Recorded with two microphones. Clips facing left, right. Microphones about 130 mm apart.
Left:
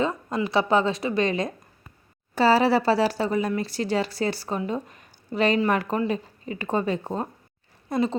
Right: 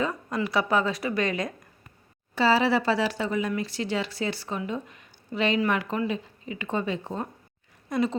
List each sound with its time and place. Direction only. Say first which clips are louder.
0.0 s a woman's voice: left 3 dB; 25° left (ahead or behind)
2.3 s speech: left 3 dB; 40° left (ahead or behind)
7.9 s a sound: left 2 dB; 30° left (ahead or behind)